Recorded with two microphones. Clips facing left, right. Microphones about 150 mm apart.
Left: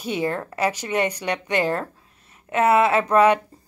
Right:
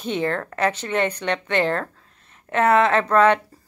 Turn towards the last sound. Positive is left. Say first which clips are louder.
# even
turn(degrees=10)  # may be behind; listen again after turning